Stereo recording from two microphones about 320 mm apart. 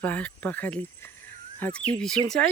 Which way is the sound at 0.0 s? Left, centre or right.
Centre.